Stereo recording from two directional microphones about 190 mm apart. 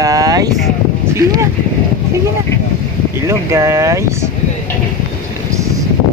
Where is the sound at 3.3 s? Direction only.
15° right (ahead or behind).